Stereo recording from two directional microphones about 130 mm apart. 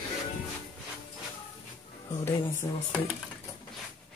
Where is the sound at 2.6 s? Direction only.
35° left (ahead or behind).